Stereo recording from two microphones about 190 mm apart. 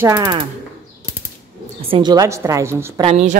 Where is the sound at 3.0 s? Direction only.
35° right (ahead or behind).